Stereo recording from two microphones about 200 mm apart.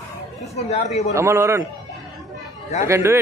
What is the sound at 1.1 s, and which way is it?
Speech, 15° right (ahead or behind).